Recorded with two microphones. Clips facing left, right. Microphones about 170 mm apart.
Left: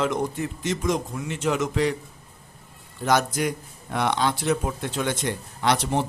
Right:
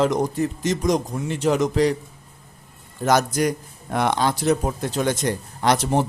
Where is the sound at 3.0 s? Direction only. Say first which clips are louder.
Right 3 dB; 40° right (ahead or behind).